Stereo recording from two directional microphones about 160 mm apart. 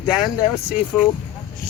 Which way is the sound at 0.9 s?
5° left (ahead or behind).